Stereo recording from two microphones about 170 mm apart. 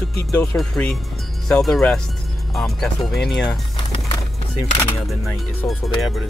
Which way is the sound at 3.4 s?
25° left (ahead or behind).